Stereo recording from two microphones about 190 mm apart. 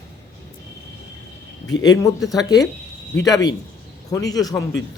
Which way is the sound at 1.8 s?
20° left (ahead or behind).